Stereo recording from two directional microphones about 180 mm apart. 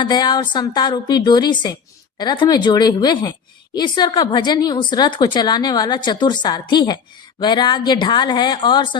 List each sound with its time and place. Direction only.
0.0 s a woman's voice: 25° left (ahead or behind)